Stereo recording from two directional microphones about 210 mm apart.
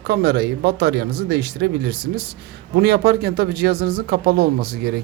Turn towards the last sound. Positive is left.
turn(degrees=-45)  # may be behind; listen again after turning